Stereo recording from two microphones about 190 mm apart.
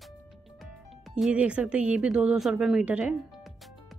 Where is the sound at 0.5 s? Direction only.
Centre (ahead or behind).